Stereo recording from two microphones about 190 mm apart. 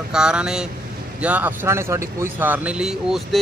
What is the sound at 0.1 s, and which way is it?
Speech, 5° right (ahead or behind).